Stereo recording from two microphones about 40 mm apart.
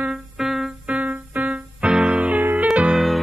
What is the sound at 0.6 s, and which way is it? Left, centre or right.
Music, right.